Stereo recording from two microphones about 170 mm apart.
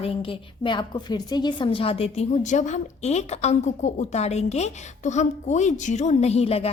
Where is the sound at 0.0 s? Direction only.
30° left (ahead or behind).